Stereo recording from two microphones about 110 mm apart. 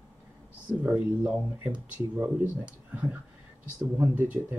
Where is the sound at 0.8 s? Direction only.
15° right (ahead or behind).